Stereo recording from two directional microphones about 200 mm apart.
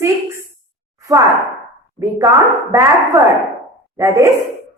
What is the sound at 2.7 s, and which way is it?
A woman's voice, 15° right (ahead or behind).